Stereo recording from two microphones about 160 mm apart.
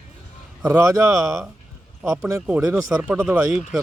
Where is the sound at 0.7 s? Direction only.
20° right (ahead or behind).